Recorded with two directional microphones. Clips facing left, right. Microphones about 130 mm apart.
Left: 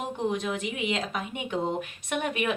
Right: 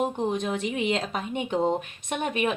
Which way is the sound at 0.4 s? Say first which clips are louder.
Right 3 dB; 35° right (ahead or behind).